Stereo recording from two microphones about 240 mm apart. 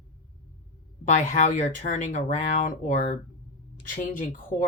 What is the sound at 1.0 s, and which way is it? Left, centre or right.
Speech, left.